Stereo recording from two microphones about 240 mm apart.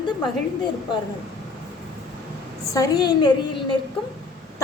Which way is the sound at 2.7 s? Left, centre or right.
Centre.